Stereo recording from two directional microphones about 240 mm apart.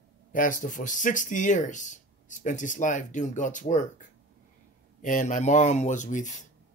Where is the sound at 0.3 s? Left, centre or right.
Left.